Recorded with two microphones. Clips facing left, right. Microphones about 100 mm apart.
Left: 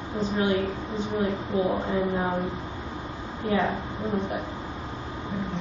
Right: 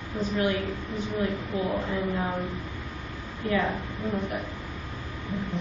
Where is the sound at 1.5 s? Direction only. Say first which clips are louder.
Left 5 dB; 25° left (ahead or behind).